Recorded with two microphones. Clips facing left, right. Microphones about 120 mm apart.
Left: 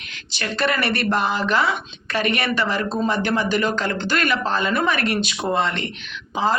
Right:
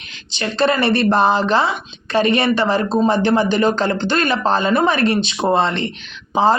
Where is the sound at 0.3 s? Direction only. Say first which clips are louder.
Right 5 dB; 25° right (ahead or behind).